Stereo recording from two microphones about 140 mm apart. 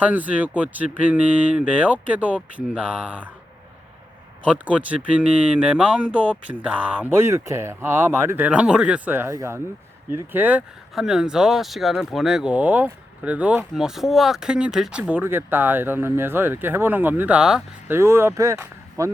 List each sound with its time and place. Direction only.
0.0 s speech: 10° right (ahead or behind)
4.4 s speech: 10° right (ahead or behind)
17.9 s speech: 20° right (ahead or behind)